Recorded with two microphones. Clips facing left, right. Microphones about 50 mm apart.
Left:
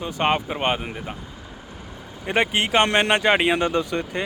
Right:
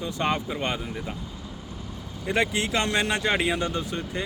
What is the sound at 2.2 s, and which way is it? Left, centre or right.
Speech, left.